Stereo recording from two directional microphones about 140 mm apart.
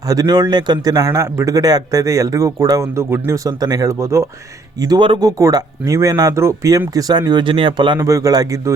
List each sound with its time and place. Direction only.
0.1 s a man's voice: 25° right (ahead or behind)
4.8 s a man's voice: 30° right (ahead or behind)
7.9 s a man's voice: 25° right (ahead or behind)